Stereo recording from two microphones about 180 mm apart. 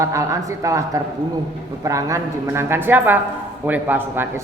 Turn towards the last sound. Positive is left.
turn(degrees=-10)  # may be behind; listen again after turning